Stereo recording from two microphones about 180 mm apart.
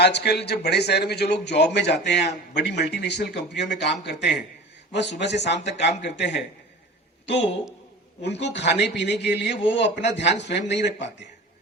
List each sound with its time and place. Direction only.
0.0 s a man's voice: 65° left (ahead or behind)